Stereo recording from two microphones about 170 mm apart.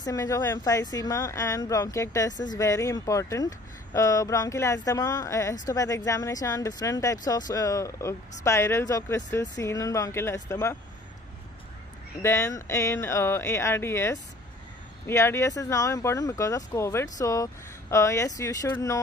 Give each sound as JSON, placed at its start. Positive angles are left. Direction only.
{"t": 0.0, "sound": "speech", "side_deg": 20}
{"t": 12.2, "sound": "speech", "side_deg": 15}